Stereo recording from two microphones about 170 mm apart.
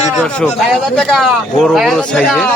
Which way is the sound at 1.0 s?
Centre (ahead or behind).